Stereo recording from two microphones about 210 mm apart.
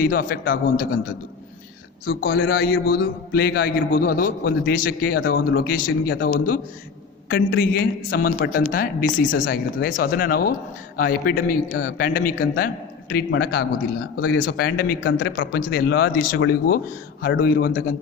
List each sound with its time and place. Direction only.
0.0 s a man's voice: 45° left (ahead or behind)
2.0 s a man's voice: 50° left (ahead or behind)